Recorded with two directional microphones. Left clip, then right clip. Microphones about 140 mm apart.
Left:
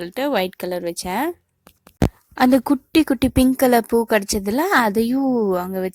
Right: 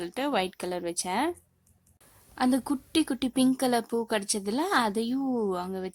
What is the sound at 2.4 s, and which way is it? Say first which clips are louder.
Speech: left 11 dB; 45° left (ahead or behind).